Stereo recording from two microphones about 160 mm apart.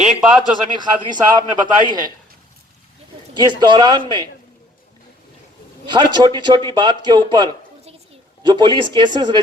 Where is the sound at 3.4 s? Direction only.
30° right (ahead or behind).